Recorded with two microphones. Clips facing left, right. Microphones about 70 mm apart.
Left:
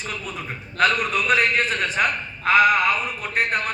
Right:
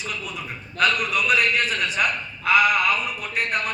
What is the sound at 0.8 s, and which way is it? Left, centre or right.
A man's voice, left.